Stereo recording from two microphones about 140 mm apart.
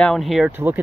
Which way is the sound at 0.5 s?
15° right (ahead or behind).